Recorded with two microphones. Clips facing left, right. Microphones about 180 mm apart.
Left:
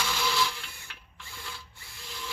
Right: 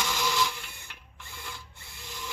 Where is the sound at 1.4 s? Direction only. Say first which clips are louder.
Right 1 dB; 15° right (ahead or behind).